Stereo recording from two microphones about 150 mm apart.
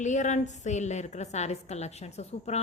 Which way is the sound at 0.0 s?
55° left (ahead or behind).